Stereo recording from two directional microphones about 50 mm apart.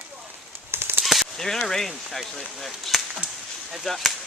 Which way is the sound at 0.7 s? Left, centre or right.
Right.